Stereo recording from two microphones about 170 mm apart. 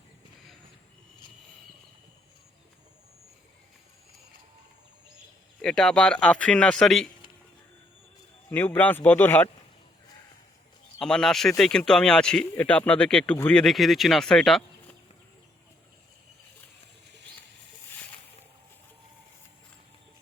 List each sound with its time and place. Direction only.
5.6 s speech: 5° left (ahead or behind)
8.4 s speech: 10° left (ahead or behind)
11.0 s speech: 5° left (ahead or behind)